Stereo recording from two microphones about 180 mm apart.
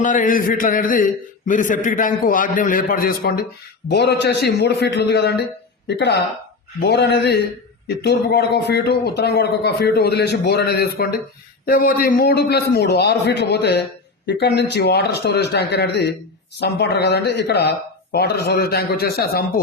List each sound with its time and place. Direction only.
0.0 s a man's voice: 45° left (ahead or behind)
3.8 s a man's voice: 70° left (ahead or behind)